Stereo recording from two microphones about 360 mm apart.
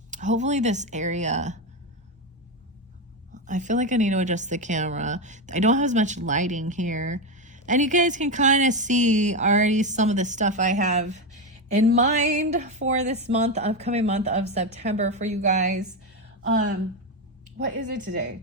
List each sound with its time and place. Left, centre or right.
0.1 s speech: centre
3.3 s speech: centre
17.6 s speech: right